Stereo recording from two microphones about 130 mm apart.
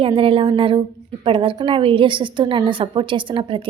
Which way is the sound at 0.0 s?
45° right (ahead or behind).